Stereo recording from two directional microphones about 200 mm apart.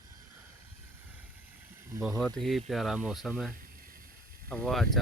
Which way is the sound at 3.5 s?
45° right (ahead or behind).